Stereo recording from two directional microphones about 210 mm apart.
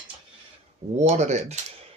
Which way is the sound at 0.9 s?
35° right (ahead or behind).